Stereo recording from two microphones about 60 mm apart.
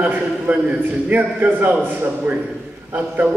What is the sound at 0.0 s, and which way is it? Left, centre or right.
A man's voice, right.